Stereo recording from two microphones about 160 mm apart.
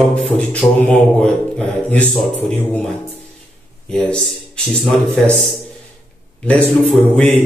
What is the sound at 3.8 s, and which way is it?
A man's voice, 5° left (ahead or behind).